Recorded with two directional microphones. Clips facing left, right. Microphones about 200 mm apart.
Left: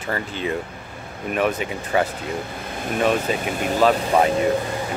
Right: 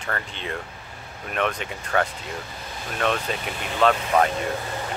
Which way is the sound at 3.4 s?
45° left (ahead or behind).